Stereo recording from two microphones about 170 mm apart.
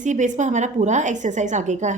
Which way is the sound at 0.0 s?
45° right (ahead or behind).